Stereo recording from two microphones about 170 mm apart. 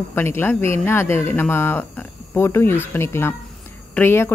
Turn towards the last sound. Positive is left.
turn(degrees=15)  # may be behind; listen again after turning